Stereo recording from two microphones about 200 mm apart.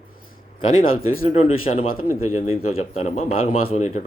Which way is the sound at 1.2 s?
30° left (ahead or behind).